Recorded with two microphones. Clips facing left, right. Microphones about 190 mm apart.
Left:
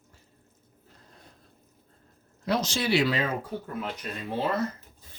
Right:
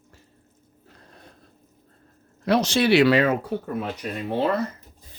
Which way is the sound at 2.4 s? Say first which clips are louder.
Right 7 dB; 70° right (ahead or behind).